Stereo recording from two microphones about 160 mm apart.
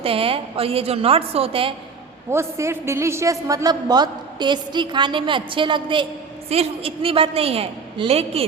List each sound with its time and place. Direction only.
0.0 s a woman's voice: 35° right (ahead or behind)
2.3 s a woman's voice: 15° right (ahead or behind); by 8.4 s 40° right (ahead or behind)